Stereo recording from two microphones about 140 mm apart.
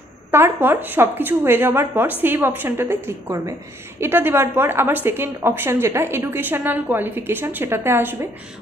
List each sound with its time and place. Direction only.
0.3 s a woman's voice: 15° right (ahead or behind)